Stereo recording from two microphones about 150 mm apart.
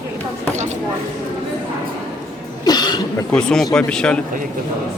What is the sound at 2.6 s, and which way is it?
Cough, 25° left (ahead or behind).